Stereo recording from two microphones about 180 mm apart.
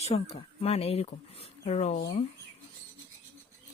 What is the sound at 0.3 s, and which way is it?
Speech, 35° left (ahead or behind).